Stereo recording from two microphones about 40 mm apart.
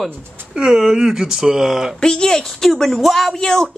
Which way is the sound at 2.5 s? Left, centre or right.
Centre.